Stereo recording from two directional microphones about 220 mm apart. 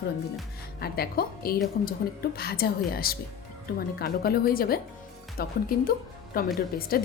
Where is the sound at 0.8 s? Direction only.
45° left (ahead or behind).